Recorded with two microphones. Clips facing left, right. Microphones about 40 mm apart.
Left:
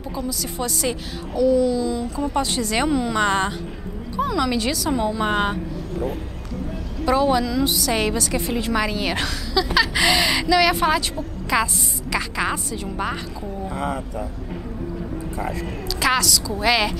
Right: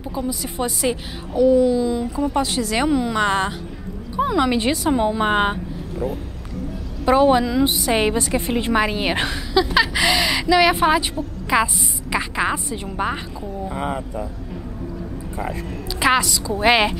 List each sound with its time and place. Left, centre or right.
0.1 s a woman's voice: right
2.3 s a woman's voice: centre
4.2 s a woman's voice: right
7.1 s a woman's voice: right
9.9 s gasp: centre
10.5 s a woman's voice: centre
16.0 s a woman's voice: right
16.4 s a woman's voice: right